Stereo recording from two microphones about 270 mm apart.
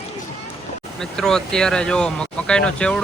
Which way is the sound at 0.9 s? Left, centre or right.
Centre.